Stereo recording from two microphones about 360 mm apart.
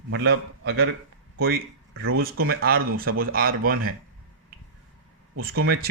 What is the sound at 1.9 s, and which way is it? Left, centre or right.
Speech, right.